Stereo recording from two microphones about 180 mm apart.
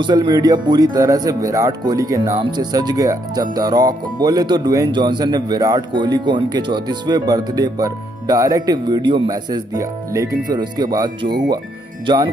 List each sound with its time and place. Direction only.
0.0 s speech: 25° right (ahead or behind)